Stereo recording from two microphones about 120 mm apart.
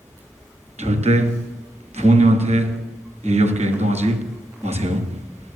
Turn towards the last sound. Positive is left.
turn(degrees=-65)  # may be behind; listen again after turning